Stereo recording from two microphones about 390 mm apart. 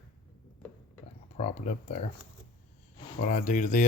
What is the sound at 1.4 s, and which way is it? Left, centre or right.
Speech, centre.